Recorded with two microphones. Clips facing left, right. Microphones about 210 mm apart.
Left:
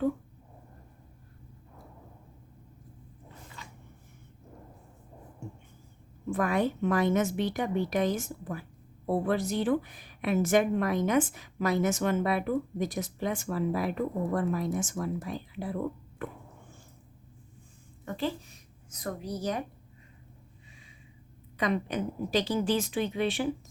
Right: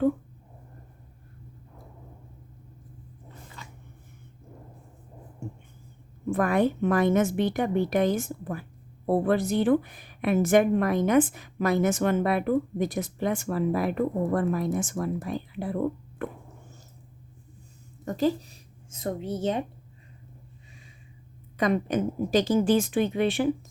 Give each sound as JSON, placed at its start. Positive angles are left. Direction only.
{"t": 6.3, "sound": "a woman's voice", "side_deg": -55}
{"t": 16.2, "sound": "dog", "side_deg": -55}
{"t": 18.0, "sound": "a woman's voice", "side_deg": -40}
{"t": 21.6, "sound": "a woman's voice", "side_deg": -45}